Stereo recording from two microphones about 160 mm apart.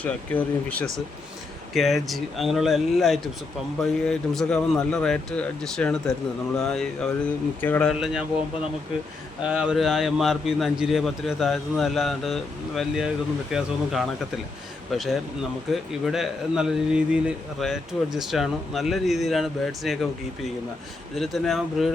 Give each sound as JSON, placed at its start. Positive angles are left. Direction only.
{"t": 0.0, "sound": "speech", "side_deg": 10}
{"t": 7.9, "sound": "speech", "side_deg": -5}
{"t": 9.4, "sound": "speech", "side_deg": -5}